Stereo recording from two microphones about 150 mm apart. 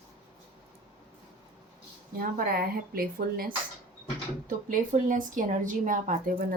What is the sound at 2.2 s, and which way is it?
Speech, 75° right (ahead or behind).